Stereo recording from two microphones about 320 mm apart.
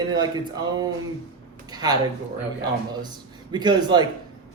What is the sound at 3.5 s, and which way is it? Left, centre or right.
Speech, centre.